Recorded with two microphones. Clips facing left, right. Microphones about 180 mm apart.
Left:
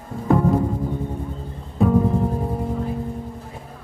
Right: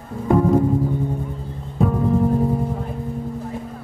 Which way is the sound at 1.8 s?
Centre (ahead or behind).